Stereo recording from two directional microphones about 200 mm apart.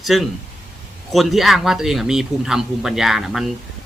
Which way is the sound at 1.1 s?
Centre (ahead or behind).